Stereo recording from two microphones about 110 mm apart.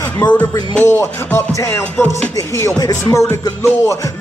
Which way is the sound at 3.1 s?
25° left (ahead or behind).